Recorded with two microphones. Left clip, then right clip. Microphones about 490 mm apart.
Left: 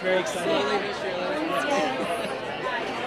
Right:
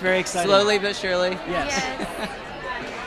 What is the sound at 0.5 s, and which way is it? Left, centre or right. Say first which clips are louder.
Speech: right 9 dB; right.